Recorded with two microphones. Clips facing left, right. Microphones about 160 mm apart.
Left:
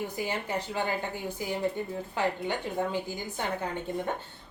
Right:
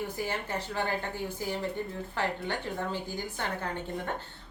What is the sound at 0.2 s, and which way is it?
A woman's voice, 15° left (ahead or behind).